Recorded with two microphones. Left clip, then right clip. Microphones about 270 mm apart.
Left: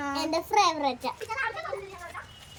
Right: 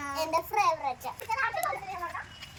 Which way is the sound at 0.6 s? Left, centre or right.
Left.